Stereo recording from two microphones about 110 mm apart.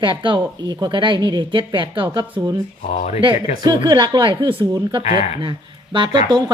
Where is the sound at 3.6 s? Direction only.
40° right (ahead or behind).